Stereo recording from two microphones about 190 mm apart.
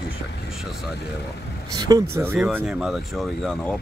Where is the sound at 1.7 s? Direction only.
20° right (ahead or behind); by 3.7 s centre (ahead or behind).